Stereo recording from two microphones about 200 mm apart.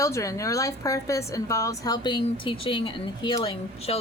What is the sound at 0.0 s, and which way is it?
A woman's voice, 15° left (ahead or behind).